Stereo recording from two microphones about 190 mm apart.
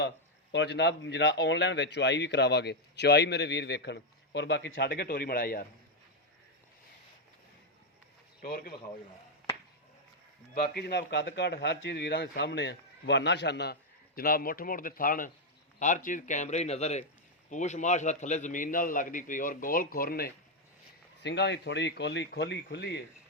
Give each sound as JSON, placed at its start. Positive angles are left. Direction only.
{"t": 0.5, "sound": "speech", "side_deg": 65}
{"t": 8.4, "sound": "speech", "side_deg": 50}
{"t": 10.5, "sound": "speech", "side_deg": 60}
{"t": 14.2, "sound": "a man's voice", "side_deg": 50}
{"t": 21.2, "sound": "speech", "side_deg": 65}